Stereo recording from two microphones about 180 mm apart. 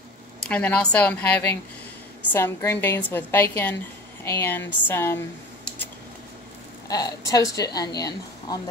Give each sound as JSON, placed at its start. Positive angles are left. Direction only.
{"t": 0.4, "sound": "a woman's voice", "side_deg": 10}
{"t": 6.9, "sound": "a woman's voice", "side_deg": 20}